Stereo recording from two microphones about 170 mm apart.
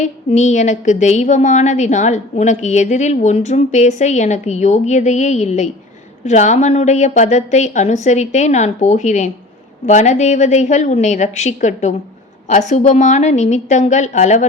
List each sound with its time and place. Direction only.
0.0 s a woman's voice: 40° left (ahead or behind)